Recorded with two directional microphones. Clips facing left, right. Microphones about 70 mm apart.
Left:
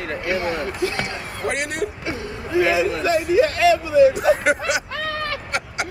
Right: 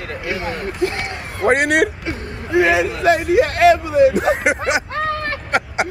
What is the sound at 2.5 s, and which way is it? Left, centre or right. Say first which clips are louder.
A man's voice: right 3 dB; right.